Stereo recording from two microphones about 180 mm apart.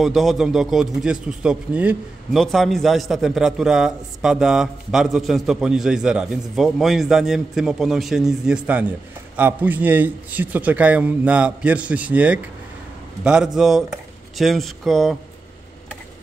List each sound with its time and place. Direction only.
0.0 s a man's voice: centre (ahead or behind)